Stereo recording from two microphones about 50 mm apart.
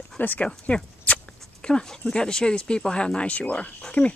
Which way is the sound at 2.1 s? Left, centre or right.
Centre.